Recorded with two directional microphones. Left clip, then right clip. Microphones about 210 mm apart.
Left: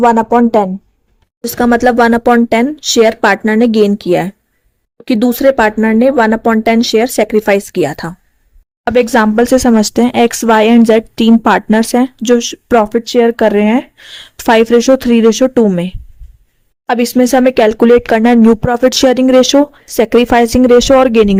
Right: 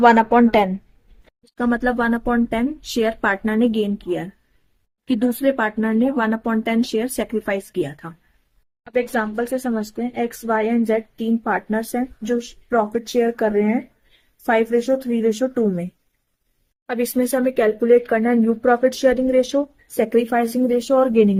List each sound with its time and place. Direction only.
0.0 s speech: 15° left (ahead or behind)
1.5 s speech: 40° left (ahead or behind)